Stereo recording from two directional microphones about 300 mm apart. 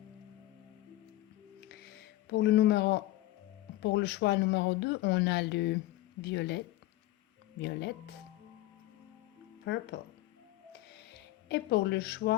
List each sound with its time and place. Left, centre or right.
1.6 s music: left
3.8 s speech: left
7.6 s speech: left
9.7 s speech: left
10.7 s music: left